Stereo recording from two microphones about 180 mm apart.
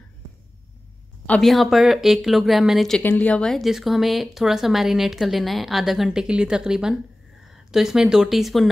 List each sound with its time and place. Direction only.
1.2 s speech: 5° left (ahead or behind)